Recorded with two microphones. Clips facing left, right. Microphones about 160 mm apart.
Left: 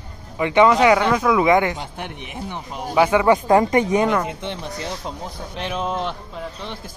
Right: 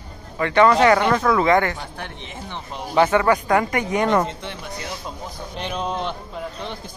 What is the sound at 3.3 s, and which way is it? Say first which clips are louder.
Speech: left 4 dB; 25° left (ahead or behind).